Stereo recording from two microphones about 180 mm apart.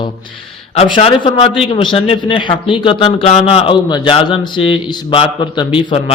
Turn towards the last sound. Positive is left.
turn(degrees=30)  # may be behind; listen again after turning